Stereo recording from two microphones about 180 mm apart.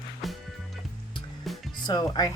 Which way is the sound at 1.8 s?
25° left (ahead or behind).